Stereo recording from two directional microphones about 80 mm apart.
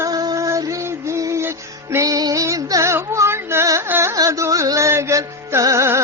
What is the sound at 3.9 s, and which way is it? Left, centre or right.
Carnatic music, right.